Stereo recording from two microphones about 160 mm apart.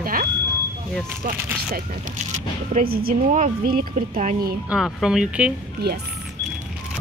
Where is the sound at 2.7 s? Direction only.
70° right (ahead or behind).